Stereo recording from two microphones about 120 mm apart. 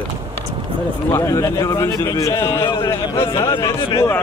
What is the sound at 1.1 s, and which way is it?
Speech, 25° left (ahead or behind).